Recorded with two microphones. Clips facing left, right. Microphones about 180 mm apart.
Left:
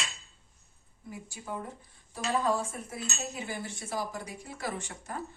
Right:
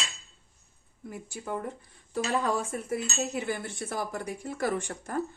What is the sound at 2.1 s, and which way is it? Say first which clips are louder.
Speech: right 1 dB; 70° right (ahead or behind).